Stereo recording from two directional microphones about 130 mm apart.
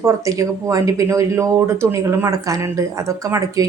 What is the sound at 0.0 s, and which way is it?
Speech, 25° right (ahead or behind).